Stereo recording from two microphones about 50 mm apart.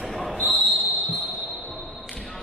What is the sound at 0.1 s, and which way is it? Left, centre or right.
Basketball bounce, centre.